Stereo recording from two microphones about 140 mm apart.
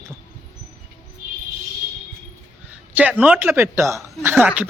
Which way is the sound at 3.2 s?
15° right (ahead or behind).